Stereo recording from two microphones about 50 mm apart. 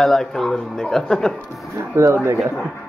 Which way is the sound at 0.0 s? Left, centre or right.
Centre.